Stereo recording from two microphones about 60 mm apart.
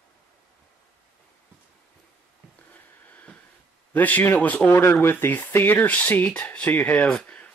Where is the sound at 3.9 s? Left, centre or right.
Left.